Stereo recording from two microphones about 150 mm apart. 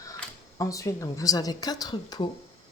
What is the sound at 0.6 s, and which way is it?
Speech, 20° left (ahead or behind).